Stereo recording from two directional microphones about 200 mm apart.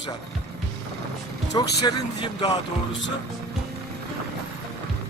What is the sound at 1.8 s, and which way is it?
Speech, 20° left (ahead or behind).